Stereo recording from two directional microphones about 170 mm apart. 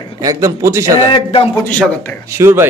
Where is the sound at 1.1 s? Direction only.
30° left (ahead or behind).